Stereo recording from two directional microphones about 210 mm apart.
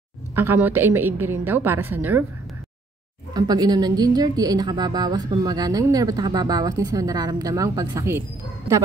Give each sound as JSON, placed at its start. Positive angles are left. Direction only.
{"t": 0.4, "sound": "a woman's voice", "side_deg": -10}
{"t": 3.3, "sound": "a woman's voice", "side_deg": -20}